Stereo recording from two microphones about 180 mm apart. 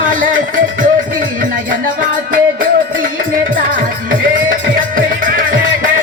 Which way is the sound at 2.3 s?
50° right (ahead or behind).